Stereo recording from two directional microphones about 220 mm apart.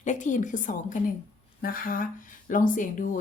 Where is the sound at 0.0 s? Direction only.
35° left (ahead or behind).